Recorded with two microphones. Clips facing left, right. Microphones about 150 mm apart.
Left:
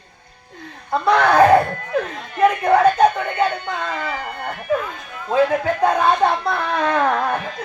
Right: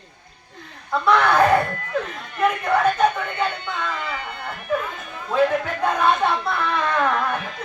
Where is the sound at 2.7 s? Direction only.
40° left (ahead or behind).